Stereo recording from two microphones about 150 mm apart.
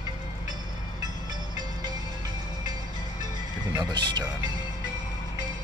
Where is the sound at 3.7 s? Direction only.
25° right (ahead or behind).